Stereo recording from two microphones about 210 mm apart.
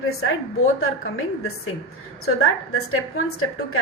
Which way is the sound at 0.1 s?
80° left.